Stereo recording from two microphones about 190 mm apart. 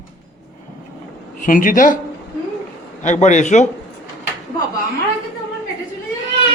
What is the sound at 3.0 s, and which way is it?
Speech, 40° left (ahead or behind).